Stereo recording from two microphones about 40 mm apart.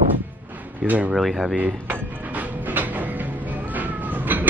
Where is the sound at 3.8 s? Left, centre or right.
Right.